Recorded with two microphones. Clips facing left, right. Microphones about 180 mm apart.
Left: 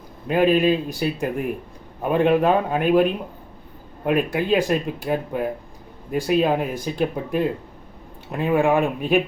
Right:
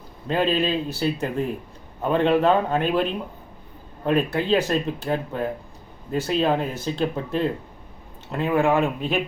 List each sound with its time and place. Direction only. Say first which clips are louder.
0.3 s speech: left 5 dB; 15° left (ahead or behind)